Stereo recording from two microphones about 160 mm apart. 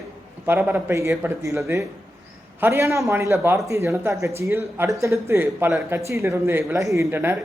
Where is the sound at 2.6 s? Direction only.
15° right (ahead or behind).